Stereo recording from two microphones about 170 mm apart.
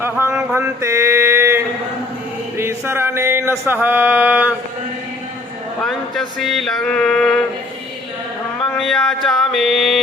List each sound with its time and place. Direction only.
0.0 s mantra: 15° right (ahead or behind)
2.6 s music: 15° right (ahead or behind)
5.8 s male singing: centre (ahead or behind)
8.8 s male singing: 5° left (ahead or behind)